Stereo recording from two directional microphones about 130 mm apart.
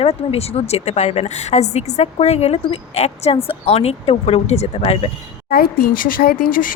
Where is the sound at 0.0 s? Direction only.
50° left (ahead or behind).